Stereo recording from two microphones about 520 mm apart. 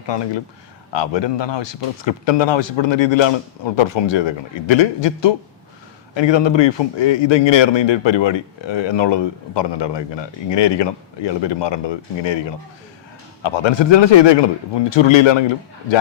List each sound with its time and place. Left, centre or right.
0.1 s a man's voice: left
13.4 s speech: left